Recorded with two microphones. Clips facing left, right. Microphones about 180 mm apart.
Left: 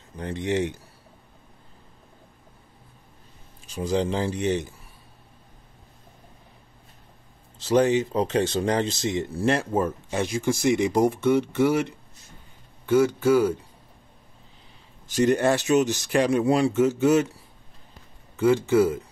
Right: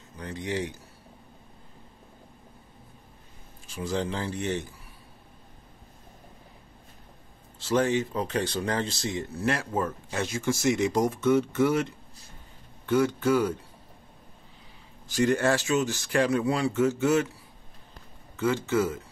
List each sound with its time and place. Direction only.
0.2 s speech: 25° left (ahead or behind)
3.6 s speech: 20° left (ahead or behind)
7.5 s speech: 20° left (ahead or behind)
15.0 s speech: 20° left (ahead or behind)
18.3 s speech: 15° left (ahead or behind)